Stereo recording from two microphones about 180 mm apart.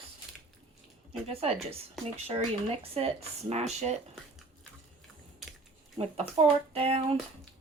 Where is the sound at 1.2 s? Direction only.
35° right (ahead or behind).